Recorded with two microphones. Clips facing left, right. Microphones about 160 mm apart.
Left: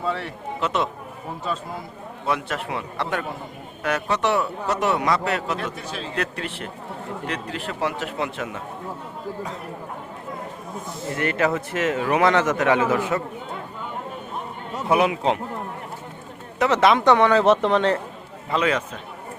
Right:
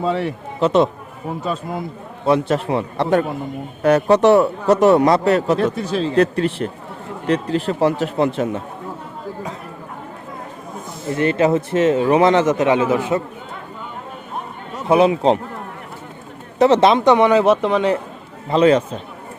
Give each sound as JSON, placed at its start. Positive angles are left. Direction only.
{"t": 0.0, "sound": "speech", "side_deg": -20}
{"t": 0.6, "sound": "a man's voice", "side_deg": -35}
{"t": 2.2, "sound": "a man's voice", "side_deg": -30}
{"t": 11.1, "sound": "speech", "side_deg": -25}
{"t": 14.8, "sound": "speech", "side_deg": -25}
{"t": 16.6, "sound": "speech", "side_deg": -30}
{"t": 17.0, "sound": "speech", "side_deg": -15}
{"t": 18.4, "sound": "a man's voice", "side_deg": -30}